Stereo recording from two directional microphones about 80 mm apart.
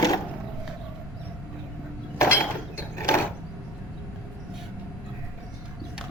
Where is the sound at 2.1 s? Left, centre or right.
Left.